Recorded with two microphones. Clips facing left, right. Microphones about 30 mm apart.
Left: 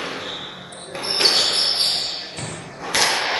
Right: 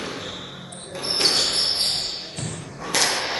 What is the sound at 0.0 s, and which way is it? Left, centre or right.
Basketball bounce, left.